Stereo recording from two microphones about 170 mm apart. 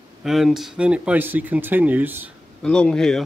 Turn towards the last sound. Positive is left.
turn(degrees=5)  # may be behind; listen again after turning